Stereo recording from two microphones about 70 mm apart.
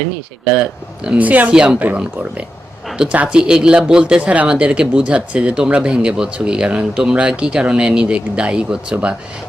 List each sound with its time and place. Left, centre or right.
0.5 s speech: centre
1.5 s speech: centre
2.9 s speech: centre